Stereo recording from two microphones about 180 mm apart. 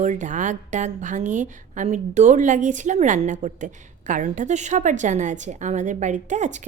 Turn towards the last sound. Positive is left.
turn(degrees=-40)  # may be behind; listen again after turning